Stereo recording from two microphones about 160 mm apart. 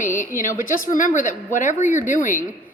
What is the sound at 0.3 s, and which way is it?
A woman's voice, 55° left (ahead or behind).